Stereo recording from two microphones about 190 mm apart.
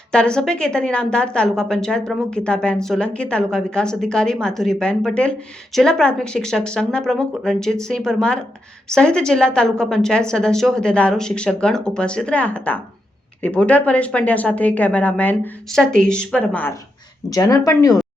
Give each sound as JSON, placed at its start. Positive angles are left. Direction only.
{"t": 0.1, "sound": "a woman's voice", "side_deg": 5}
{"t": 17.2, "sound": "speech", "side_deg": 20}